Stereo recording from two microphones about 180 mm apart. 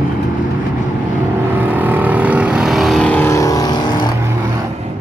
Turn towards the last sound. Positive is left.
turn(degrees=25)  # may be behind; listen again after turning